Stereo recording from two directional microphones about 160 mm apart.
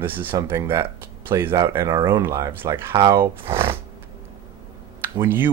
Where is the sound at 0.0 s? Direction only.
10° right (ahead or behind).